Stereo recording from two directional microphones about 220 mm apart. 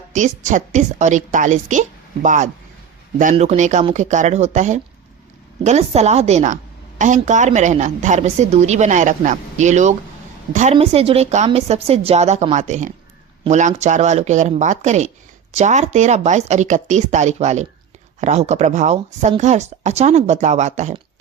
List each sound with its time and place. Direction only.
0.1 s a woman's voice: 35° right (ahead or behind)